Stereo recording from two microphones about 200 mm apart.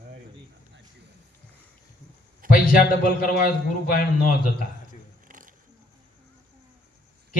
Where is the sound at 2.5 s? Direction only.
45° left (ahead or behind).